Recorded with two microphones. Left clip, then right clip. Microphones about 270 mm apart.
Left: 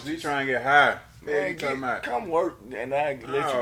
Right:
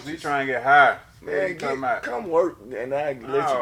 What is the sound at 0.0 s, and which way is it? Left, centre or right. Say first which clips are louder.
Speech: right 2 dB; left.